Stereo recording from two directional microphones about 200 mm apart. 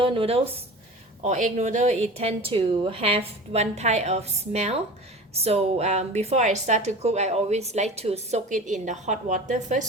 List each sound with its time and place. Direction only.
0.0 s a woman's voice: 25° right (ahead or behind)